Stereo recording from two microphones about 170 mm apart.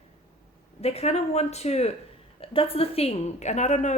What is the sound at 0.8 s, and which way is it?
A woman's voice, 40° left (ahead or behind).